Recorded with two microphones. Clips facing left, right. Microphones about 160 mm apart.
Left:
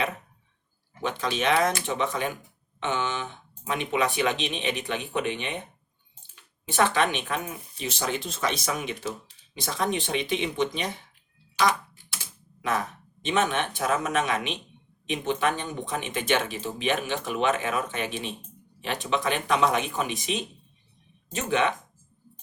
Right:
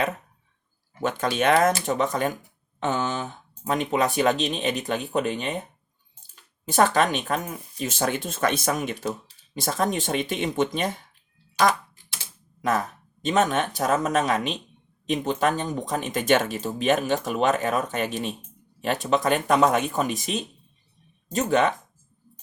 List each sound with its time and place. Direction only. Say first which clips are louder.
1.0 s speech: right 4 dB; 50° right (ahead or behind)
13.2 s speech: right 3 dB; 40° right (ahead or behind)